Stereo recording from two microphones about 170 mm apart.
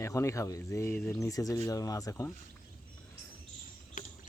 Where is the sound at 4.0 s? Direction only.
50° left (ahead or behind).